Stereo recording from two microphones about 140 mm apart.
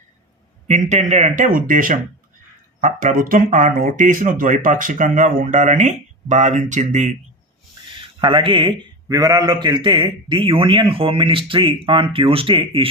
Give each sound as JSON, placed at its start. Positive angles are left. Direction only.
{"t": 0.7, "sound": "speech", "side_deg": -55}
{"t": 8.2, "sound": "a man's voice", "side_deg": -35}
{"t": 9.0, "sound": "a man's voice", "side_deg": -25}